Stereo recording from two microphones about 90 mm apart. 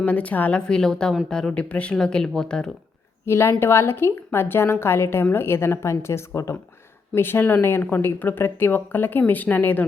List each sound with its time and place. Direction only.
0.0 s speech: 15° left (ahead or behind)
3.2 s a woman's voice: 30° left (ahead or behind)